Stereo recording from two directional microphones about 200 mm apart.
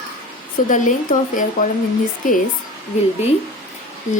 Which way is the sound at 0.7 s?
40° left (ahead or behind).